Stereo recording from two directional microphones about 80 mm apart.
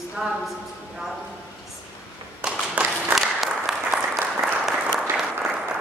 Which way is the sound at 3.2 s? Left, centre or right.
Centre.